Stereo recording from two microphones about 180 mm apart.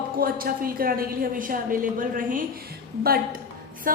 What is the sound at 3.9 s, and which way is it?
Speech, 50° right (ahead or behind).